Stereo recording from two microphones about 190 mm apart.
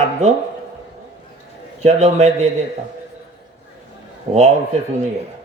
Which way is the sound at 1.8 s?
35° right (ahead or behind).